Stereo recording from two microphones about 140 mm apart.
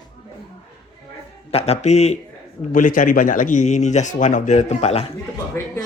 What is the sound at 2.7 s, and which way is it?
A man's voice, 70° left (ahead or behind).